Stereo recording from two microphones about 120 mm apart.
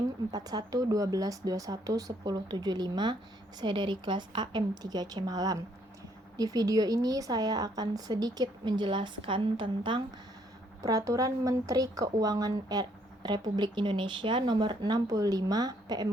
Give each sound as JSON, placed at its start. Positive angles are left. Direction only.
{"t": 0.3, "sound": "speech", "side_deg": -35}
{"t": 10.8, "sound": "a woman's voice", "side_deg": -25}